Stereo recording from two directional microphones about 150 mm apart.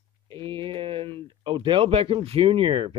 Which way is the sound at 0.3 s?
35° right (ahead or behind).